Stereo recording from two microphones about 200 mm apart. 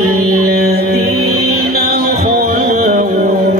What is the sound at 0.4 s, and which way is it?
Music, 50° right (ahead or behind).